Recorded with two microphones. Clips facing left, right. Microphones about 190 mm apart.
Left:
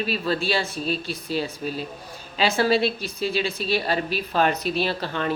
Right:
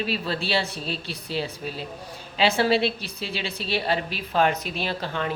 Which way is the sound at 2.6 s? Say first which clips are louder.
Left 1 dB; 25° right (ahead or behind).